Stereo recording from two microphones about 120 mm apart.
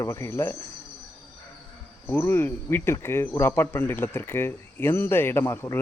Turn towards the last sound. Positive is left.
turn(degrees=20)  # may be behind; listen again after turning